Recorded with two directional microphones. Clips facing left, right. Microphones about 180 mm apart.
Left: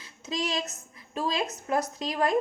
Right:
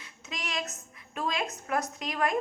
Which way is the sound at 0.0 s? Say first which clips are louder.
Left 8 dB; 30° left (ahead or behind).